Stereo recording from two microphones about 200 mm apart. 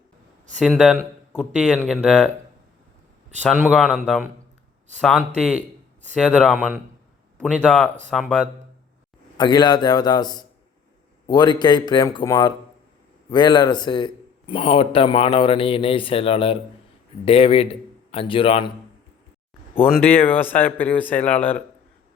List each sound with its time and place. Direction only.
0.6 s speech: centre (ahead or behind)
3.4 s speech: 5° left (ahead or behind)
5.5 s a sound: 35° right (ahead or behind)
6.1 s speech: 5° right (ahead or behind)
8.1 s speech: 5° right (ahead or behind)
9.4 s a man's voice: 20° left (ahead or behind)
19.8 s speech: 10° left (ahead or behind)